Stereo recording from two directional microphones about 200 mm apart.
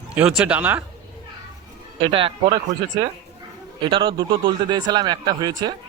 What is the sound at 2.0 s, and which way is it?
A man's voice, 25° right (ahead or behind).